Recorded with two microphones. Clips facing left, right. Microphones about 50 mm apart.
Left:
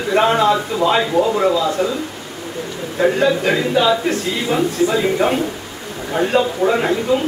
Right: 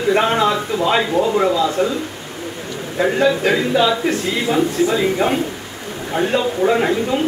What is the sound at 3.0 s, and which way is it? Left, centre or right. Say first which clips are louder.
Speech: even; centre.